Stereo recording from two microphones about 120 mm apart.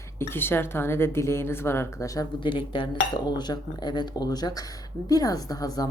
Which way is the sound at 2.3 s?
45° left (ahead or behind).